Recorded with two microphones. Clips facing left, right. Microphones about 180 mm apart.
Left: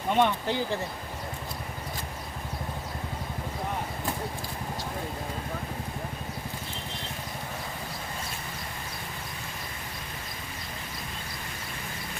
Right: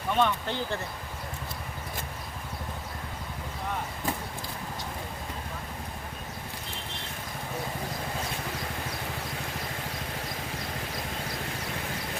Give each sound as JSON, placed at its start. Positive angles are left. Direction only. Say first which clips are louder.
{"t": 0.1, "sound": "speech", "louder": "left 2 dB", "side_deg": 20}